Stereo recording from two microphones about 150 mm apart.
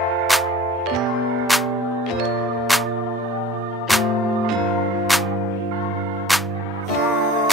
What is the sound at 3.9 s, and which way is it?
Music, centre (ahead or behind).